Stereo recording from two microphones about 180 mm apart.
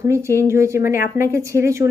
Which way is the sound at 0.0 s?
15° right (ahead or behind).